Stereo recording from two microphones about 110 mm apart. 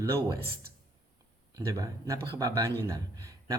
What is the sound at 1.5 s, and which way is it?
A man's voice, 30° right (ahead or behind).